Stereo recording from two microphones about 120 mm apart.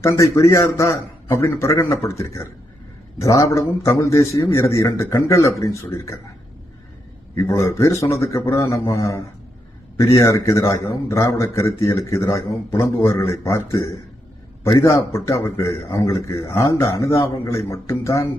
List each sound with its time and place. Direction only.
0.0 s a man's voice: 25° left (ahead or behind)
7.3 s a man's voice: 25° left (ahead or behind)